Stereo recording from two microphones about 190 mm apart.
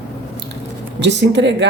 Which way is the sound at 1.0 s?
65° right (ahead or behind).